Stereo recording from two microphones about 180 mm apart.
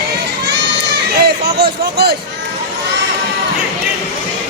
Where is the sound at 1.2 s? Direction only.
65° right (ahead or behind).